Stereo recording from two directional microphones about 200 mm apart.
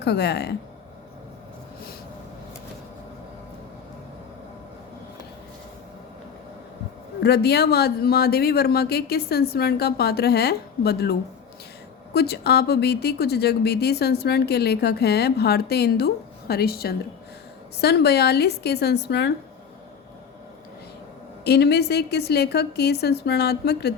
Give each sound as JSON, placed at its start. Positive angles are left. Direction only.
{"t": 0.0, "sound": "a woman's voice", "side_deg": 55}
{"t": 7.2, "sound": "a woman's voice", "side_deg": 55}
{"t": 21.4, "sound": "a woman's voice", "side_deg": 55}